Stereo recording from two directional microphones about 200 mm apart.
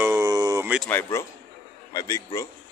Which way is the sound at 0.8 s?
10° left (ahead or behind).